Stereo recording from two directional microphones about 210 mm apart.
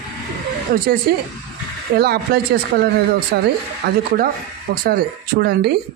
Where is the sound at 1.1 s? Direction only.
50° right (ahead or behind).